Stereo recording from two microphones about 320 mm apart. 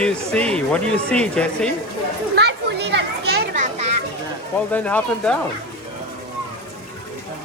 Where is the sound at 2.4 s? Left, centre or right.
Right.